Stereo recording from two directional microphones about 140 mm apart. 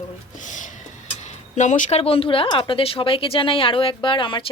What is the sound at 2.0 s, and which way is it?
Speech, 45° left (ahead or behind).